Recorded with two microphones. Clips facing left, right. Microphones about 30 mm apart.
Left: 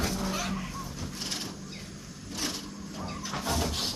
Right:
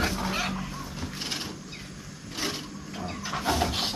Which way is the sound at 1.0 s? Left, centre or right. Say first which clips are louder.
Right 4 dB; right.